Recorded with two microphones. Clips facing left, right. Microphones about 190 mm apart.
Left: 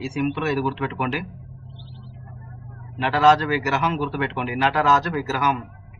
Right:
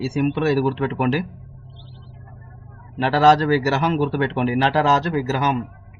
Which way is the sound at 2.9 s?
35° right (ahead or behind).